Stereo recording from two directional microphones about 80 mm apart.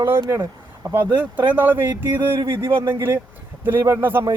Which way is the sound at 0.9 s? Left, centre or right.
Right.